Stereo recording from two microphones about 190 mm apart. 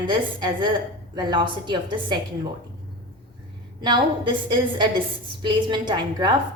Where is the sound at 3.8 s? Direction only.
25° right (ahead or behind).